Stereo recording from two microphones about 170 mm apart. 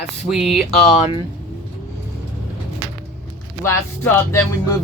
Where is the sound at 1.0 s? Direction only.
35° left (ahead or behind).